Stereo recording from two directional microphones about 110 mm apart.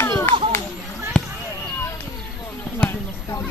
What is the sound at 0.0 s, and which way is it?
Children playing, 25° left (ahead or behind).